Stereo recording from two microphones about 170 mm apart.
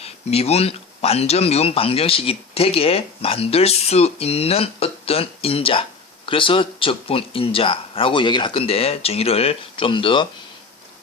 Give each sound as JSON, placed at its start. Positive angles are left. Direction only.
{"t": 0.0, "sound": "speech", "side_deg": 40}